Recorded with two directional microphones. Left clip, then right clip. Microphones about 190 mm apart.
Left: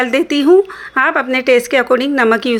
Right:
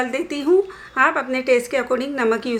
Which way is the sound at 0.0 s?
40° left (ahead or behind).